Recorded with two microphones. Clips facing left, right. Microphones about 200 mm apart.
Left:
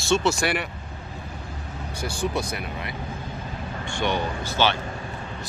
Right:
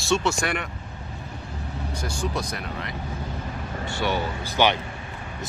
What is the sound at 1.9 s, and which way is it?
Speech, 30° left (ahead or behind).